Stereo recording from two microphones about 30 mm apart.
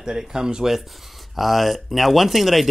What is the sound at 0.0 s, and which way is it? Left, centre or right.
Speech, right.